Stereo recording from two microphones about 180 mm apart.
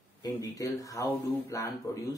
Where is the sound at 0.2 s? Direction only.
20° left (ahead or behind).